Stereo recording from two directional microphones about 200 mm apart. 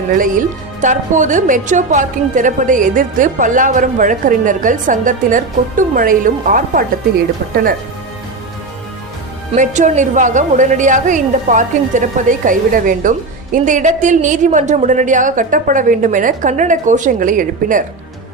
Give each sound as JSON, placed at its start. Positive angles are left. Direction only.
{"t": 0.1, "sound": "a woman's voice", "side_deg": -40}
{"t": 9.5, "sound": "a woman's voice", "side_deg": -40}